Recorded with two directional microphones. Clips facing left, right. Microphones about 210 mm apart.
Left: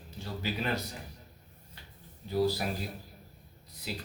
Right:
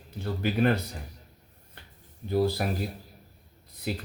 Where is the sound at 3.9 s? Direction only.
55° right (ahead or behind).